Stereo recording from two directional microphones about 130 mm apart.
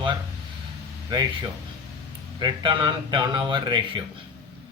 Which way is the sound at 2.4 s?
35° right (ahead or behind).